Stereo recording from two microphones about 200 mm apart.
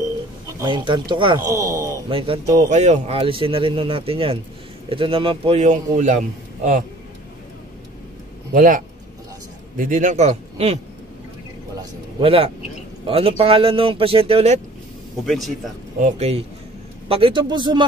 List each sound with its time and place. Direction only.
0.6 s speech: 20° right (ahead or behind); by 6.8 s 40° right (ahead or behind)
8.5 s a man's voice: 45° right (ahead or behind)
11.8 s a man's voice: 25° right (ahead or behind)
15.2 s speech: centre (ahead or behind)
16.0 s a man's voice: 30° right (ahead or behind)